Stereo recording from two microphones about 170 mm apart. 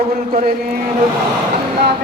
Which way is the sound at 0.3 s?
60° right (ahead or behind).